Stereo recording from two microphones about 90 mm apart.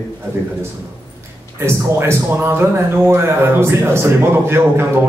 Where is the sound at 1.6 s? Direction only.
30° right (ahead or behind).